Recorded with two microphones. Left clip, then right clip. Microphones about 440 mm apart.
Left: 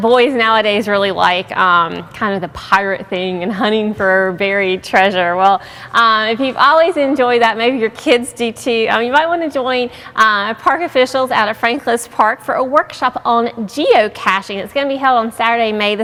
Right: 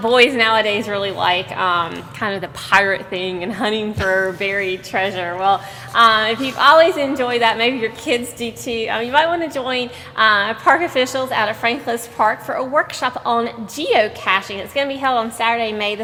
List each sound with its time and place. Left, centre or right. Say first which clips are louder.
0.0 s a woman's voice: left 2 dB; left